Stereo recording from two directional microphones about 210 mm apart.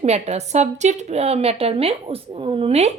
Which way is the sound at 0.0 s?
30° right (ahead or behind).